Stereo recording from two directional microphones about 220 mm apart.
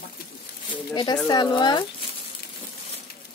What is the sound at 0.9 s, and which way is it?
Speech, 20° left (ahead or behind).